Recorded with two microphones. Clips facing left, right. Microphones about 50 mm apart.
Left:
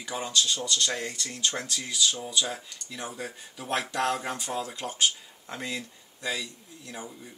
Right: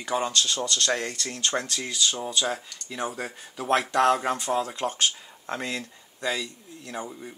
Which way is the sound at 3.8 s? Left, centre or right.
Right.